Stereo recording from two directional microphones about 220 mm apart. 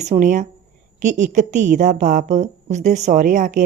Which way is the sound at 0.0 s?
35° right (ahead or behind).